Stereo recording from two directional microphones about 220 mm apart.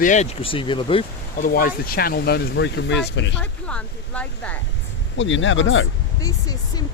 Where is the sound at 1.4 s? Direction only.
40° left (ahead or behind).